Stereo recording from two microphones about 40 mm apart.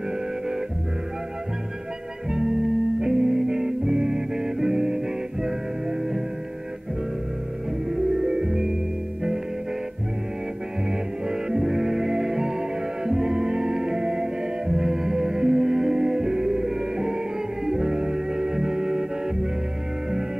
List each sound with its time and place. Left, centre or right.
2.3 s music: centre
7.9 s music: centre
10.9 s music: centre